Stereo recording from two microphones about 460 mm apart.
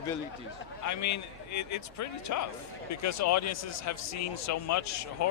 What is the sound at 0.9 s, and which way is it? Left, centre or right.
A man's voice, left.